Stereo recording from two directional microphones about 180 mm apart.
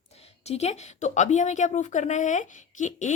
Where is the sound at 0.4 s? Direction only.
35° left (ahead or behind).